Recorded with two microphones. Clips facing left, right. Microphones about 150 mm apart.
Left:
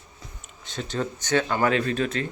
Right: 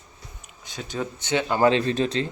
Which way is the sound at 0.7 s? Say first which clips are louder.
Left 1 dB; 15° right (ahead or behind).